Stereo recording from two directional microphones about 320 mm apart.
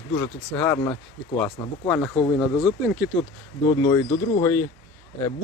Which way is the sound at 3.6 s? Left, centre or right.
Centre.